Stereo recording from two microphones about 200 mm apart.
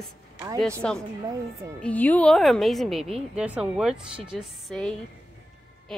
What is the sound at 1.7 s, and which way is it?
A woman's voice, 5° left (ahead or behind).